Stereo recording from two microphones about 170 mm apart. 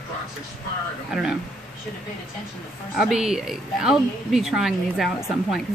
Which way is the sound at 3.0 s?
5° right (ahead or behind).